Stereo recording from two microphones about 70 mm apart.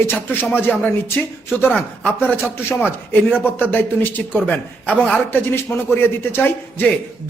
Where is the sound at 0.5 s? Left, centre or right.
Centre.